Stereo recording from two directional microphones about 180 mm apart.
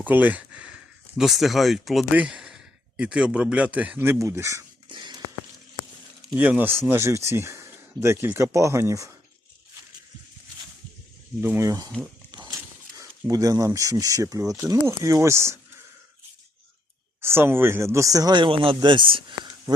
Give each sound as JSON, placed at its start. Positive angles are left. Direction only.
{"t": 0.0, "sound": "speech", "side_deg": -10}
{"t": 4.9, "sound": "a sound", "side_deg": -25}
{"t": 6.2, "sound": "speech", "side_deg": -5}
{"t": 11.3, "sound": "speech", "side_deg": -15}
{"t": 17.2, "sound": "speech", "side_deg": -15}